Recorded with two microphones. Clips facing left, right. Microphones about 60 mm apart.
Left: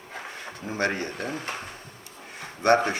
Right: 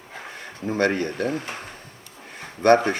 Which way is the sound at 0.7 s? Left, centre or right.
Right.